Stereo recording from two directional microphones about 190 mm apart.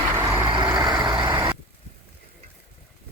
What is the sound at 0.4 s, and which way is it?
Vehicle, 25° right (ahead or behind).